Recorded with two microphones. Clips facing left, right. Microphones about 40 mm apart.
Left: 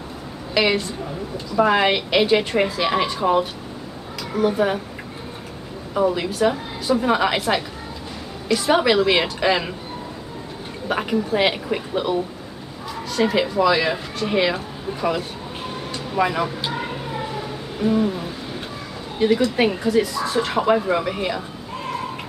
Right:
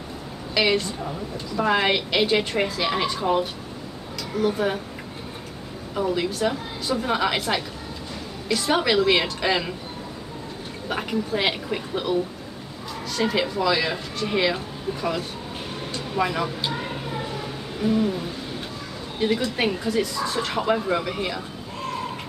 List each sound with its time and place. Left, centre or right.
0.6 s a woman's voice: centre
5.9 s speech: centre
10.9 s speech: centre
17.8 s speech: centre